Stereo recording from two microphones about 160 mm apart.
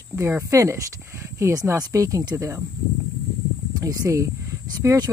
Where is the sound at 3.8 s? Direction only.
20° right (ahead or behind).